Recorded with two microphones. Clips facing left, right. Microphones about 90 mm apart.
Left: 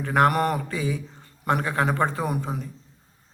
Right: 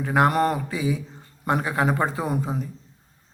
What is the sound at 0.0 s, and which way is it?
Speech, 10° right (ahead or behind).